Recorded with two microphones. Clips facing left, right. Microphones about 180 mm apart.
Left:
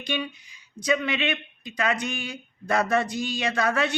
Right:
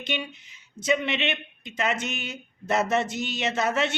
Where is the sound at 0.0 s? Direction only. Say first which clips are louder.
Left 2 dB; 25° right (ahead or behind).